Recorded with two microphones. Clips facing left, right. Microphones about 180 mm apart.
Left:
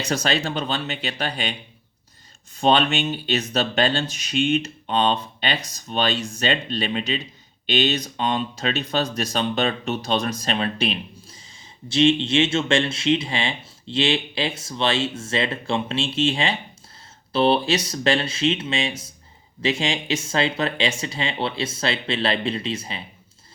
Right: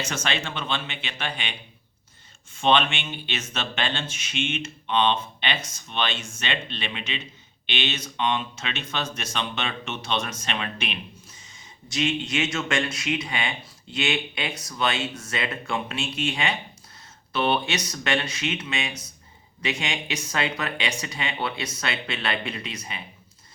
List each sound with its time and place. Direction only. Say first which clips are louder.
0.0 s speech: left 6 dB; 35° left (ahead or behind)
2.6 s speech: left 3 dB; 40° left (ahead or behind)